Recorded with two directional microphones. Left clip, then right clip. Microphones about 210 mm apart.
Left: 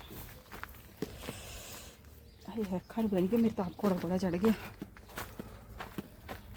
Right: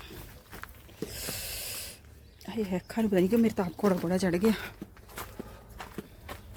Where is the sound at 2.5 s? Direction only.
40° right (ahead or behind).